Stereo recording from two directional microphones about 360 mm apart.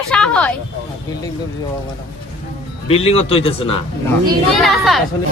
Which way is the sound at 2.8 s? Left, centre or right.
Centre.